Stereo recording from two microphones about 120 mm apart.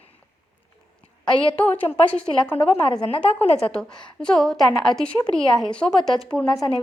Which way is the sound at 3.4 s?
60° left (ahead or behind).